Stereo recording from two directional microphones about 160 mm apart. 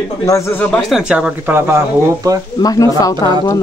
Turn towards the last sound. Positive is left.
turn(degrees=20)  # may be behind; listen again after turning